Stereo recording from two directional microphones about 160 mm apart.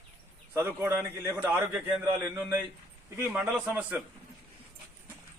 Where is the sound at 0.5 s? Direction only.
15° right (ahead or behind).